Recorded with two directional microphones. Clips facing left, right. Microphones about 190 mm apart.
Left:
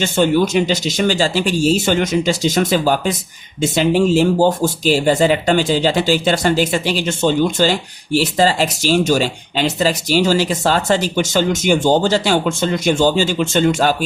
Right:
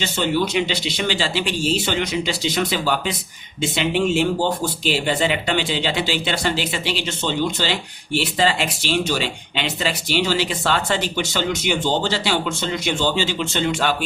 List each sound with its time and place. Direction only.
0.0 s speech: 45° left (ahead or behind)